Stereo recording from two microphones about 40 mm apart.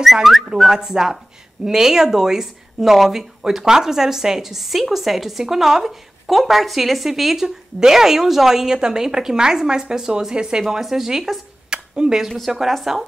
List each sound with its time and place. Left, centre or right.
0.0 s speech: centre
0.7 s speech: centre
11.7 s a sound: right
12.4 s speech: centre